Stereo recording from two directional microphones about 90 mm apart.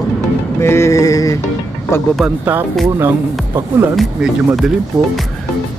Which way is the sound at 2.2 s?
20° right (ahead or behind).